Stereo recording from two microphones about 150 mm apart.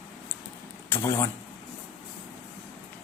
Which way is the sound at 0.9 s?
15° left (ahead or behind).